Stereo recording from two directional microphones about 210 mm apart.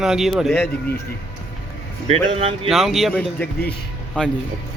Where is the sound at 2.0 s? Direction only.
30° right (ahead or behind).